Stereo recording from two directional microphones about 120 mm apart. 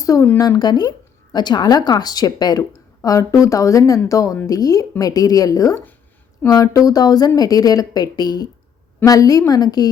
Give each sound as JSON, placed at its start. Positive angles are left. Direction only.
{"t": 0.0, "sound": "a woman's voice", "side_deg": 30}